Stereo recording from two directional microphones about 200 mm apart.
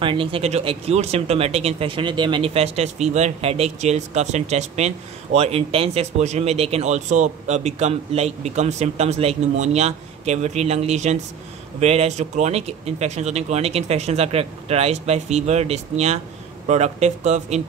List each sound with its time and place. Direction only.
0.0 s speech: 25° right (ahead or behind)